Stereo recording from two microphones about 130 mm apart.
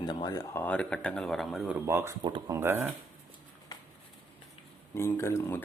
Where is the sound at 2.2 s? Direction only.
35° right (ahead or behind).